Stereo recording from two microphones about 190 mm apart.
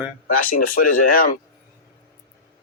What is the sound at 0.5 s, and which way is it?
Speech, 50° left (ahead or behind).